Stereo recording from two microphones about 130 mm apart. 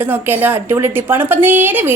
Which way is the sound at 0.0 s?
15° right (ahead or behind).